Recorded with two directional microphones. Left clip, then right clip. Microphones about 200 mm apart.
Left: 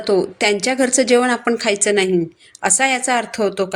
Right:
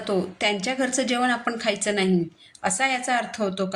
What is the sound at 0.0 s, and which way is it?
A woman's voice, 35° left (ahead or behind).